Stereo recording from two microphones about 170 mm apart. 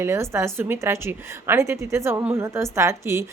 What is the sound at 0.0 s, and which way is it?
A woman's voice, 15° right (ahead or behind).